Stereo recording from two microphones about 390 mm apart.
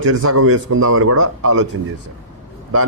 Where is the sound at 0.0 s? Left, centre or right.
Right.